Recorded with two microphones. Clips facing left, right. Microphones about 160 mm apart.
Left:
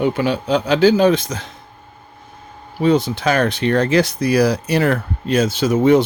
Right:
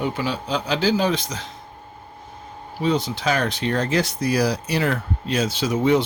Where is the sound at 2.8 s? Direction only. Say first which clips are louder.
Left 6 dB; 55° left (ahead or behind).